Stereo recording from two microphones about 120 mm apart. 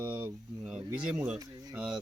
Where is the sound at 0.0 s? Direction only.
10° right (ahead or behind).